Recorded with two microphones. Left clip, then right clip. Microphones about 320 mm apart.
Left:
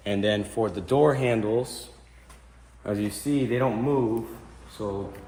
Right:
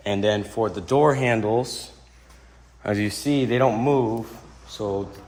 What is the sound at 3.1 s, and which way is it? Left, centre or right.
Speech, right.